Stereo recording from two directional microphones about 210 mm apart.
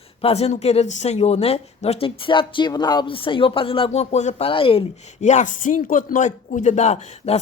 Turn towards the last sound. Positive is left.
turn(degrees=30)  # may be behind; listen again after turning